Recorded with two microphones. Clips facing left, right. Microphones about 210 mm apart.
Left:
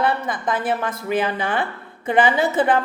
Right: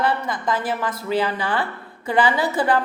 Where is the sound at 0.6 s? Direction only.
50° left (ahead or behind).